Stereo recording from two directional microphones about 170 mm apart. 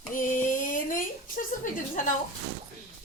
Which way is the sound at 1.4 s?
55° left (ahead or behind).